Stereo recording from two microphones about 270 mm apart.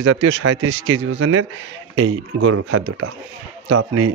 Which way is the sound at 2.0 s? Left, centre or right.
Right.